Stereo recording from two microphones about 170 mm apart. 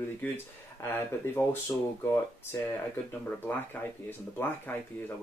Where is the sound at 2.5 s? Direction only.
20° left (ahead or behind).